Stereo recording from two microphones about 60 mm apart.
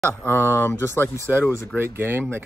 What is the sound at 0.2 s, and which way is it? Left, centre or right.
Speech, left.